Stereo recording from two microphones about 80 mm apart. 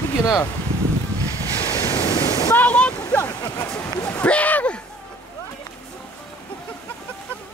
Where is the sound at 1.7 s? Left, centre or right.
Left.